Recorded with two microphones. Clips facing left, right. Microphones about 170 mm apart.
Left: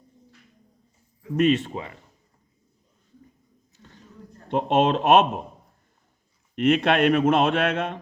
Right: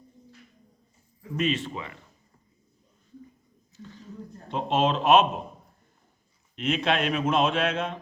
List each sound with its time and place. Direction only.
1.4 s speech: 55° left (ahead or behind)
4.4 s speech: 60° left (ahead or behind)
6.6 s speech: 60° left (ahead or behind)